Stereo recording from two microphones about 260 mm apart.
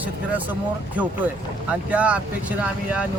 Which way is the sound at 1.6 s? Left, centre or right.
Centre.